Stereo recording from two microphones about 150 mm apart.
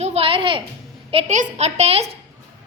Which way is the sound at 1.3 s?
50° right (ahead or behind).